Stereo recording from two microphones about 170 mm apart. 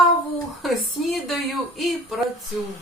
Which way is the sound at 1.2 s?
Centre (ahead or behind).